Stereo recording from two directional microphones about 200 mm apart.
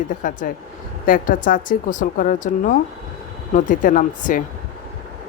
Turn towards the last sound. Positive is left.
turn(degrees=40)  # may be behind; listen again after turning